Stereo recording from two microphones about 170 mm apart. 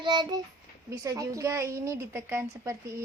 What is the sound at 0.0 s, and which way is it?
A woman's voice, 25° right (ahead or behind).